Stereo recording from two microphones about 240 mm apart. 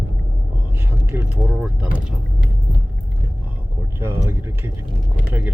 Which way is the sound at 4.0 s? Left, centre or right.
Centre.